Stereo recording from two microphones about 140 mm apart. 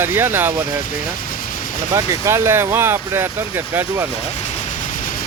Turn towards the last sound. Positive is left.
turn(degrees=-15)  # may be behind; listen again after turning